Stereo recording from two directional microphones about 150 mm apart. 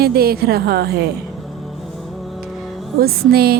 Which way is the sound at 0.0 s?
90° right.